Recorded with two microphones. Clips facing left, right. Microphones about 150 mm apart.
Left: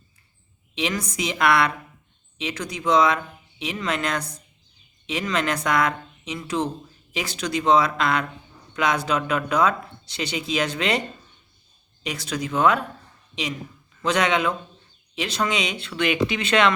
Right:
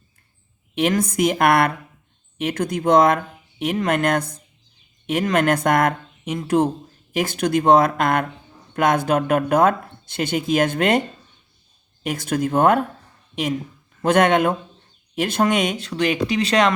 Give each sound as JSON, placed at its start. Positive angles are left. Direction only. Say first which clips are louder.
{"t": 0.8, "sound": "speech", "louder": "right 8 dB", "side_deg": -55}
{"t": 12.0, "sound": "speech", "louder": "right 7 dB", "side_deg": -50}